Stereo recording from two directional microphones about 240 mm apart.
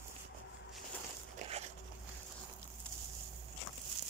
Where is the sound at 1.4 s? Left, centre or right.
Right.